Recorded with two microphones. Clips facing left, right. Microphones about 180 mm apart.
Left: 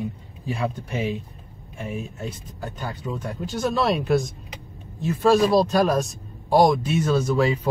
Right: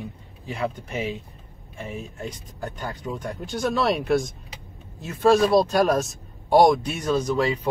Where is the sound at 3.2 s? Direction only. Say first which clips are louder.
Left 1 dB; centre (ahead or behind).